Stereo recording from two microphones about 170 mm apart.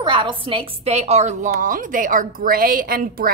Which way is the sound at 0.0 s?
30° right (ahead or behind).